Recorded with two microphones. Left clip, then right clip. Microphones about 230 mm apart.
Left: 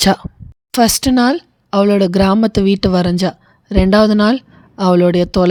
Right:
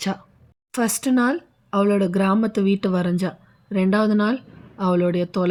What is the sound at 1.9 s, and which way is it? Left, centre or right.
Speech, left.